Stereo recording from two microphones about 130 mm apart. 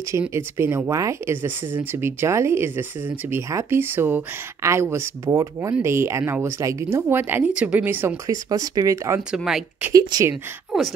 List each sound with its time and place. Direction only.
0.3 s speech: 20° right (ahead or behind)
8.3 s speech: 25° right (ahead or behind)
9.3 s speech: 5° right (ahead or behind)
9.9 s speech: 30° right (ahead or behind)
10.7 s speech: centre (ahead or behind)